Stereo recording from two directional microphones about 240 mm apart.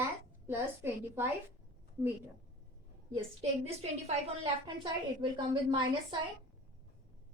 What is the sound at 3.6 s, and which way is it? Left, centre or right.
A woman's voice, right.